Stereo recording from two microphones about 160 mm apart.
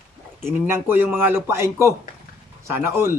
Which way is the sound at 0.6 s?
15° right (ahead or behind).